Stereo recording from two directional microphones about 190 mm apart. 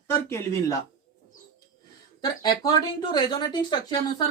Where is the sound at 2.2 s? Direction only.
20° left (ahead or behind).